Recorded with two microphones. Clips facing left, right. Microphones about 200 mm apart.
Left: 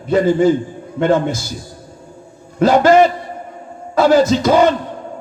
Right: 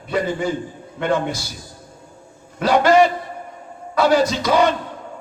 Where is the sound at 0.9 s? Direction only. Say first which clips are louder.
Left 6 dB; 45° left (ahead or behind).